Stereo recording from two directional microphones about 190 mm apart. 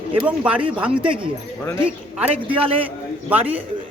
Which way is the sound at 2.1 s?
5° right (ahead or behind).